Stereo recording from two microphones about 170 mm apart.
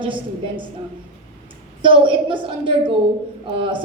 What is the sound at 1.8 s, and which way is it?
A woman's voice, 30° right (ahead or behind).